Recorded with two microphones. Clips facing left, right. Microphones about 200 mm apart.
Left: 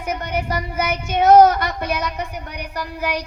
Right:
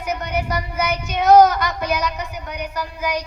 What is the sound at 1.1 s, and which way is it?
Child singing, 50° left (ahead or behind).